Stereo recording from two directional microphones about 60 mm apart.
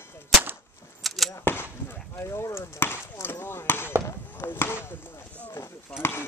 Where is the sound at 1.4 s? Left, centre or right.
Left.